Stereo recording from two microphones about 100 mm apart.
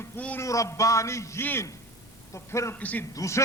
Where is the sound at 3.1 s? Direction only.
30° left (ahead or behind).